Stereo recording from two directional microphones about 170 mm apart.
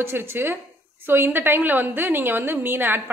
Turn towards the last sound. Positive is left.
turn(degrees=-10)  # may be behind; listen again after turning